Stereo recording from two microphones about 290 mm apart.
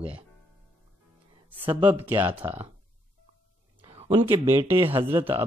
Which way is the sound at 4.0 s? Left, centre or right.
Centre.